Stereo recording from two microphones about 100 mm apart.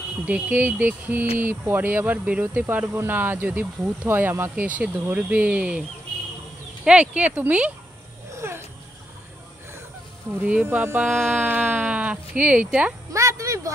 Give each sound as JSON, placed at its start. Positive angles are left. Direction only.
{"t": 0.3, "sound": "speech", "side_deg": -15}
{"t": 8.4, "sound": "a sound", "side_deg": -25}
{"t": 10.4, "sound": "speech", "side_deg": -15}
{"t": 13.1, "sound": "speech", "side_deg": -30}